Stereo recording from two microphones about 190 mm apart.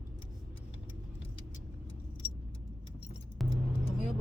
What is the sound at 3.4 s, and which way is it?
Vehicle, centre (ahead or behind).